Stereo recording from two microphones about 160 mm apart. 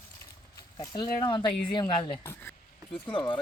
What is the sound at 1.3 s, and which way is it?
A woman's voice, 30° left (ahead or behind).